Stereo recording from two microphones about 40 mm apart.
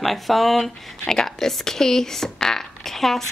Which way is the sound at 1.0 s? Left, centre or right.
Centre.